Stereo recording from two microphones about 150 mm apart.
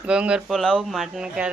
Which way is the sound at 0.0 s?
5° right (ahead or behind).